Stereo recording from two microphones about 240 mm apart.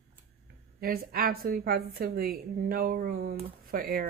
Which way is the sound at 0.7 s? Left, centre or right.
Right.